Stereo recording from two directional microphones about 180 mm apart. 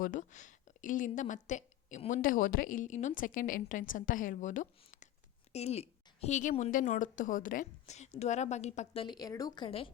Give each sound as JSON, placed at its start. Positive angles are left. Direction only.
{"t": 0.0, "sound": "a woman's voice", "side_deg": 45}